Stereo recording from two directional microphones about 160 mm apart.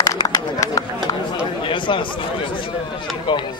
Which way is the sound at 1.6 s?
30° left (ahead or behind).